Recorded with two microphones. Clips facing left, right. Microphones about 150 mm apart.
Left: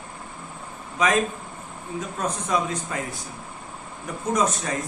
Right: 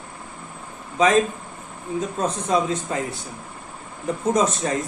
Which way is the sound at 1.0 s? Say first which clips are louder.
Right 4 dB; 25° right (ahead or behind).